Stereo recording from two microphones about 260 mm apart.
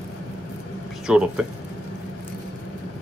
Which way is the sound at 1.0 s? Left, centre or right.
Centre.